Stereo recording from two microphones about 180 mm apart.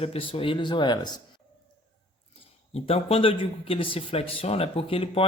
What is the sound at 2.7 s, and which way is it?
A man's voice, 30° left (ahead or behind).